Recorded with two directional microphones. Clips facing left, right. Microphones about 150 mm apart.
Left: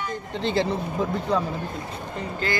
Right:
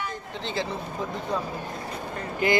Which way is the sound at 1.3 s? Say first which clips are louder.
Left 5 dB; 70° left (ahead or behind).